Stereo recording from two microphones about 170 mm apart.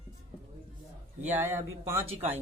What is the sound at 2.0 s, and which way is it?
Speech, 35° right (ahead or behind).